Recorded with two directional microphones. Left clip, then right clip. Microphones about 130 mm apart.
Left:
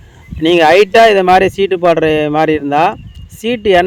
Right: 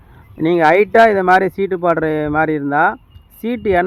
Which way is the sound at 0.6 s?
40° left (ahead or behind).